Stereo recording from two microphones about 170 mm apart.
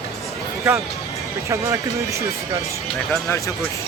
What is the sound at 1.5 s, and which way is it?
Speech, 15° right (ahead or behind).